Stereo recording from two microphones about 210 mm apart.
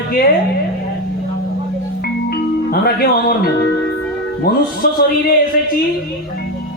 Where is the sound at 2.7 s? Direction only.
45° left (ahead or behind).